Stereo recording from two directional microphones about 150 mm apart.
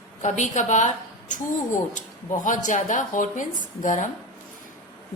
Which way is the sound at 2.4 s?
60° left (ahead or behind).